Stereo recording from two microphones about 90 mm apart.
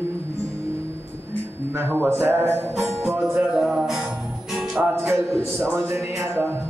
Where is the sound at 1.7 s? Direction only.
25° right (ahead or behind).